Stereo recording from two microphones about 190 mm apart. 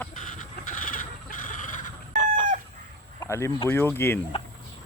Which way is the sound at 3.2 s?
15° left (ahead or behind).